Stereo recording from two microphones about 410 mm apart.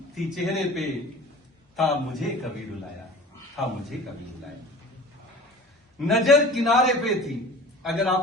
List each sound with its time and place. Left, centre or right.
0.1 s a man's voice: centre
6.0 s a man's voice: centre